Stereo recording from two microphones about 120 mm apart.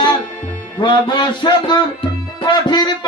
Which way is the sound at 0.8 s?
40° left (ahead or behind).